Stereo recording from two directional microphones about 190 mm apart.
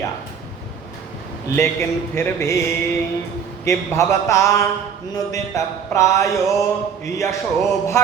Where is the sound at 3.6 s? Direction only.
15° left (ahead or behind).